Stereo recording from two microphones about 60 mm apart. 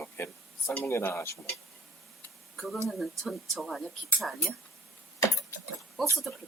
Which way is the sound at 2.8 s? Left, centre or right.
Centre.